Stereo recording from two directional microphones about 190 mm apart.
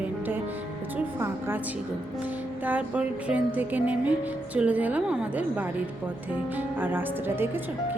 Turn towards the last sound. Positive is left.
turn(degrees=-10)  # may be behind; listen again after turning